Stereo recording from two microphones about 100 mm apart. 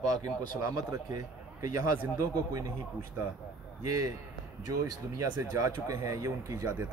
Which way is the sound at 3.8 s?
35° right (ahead or behind).